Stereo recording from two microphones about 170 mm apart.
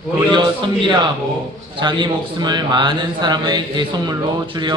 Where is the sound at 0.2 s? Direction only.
25° right (ahead or behind).